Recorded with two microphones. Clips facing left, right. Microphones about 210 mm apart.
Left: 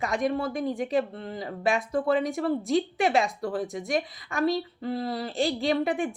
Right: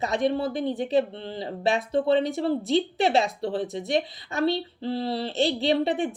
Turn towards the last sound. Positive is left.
turn(degrees=-30)  # may be behind; listen again after turning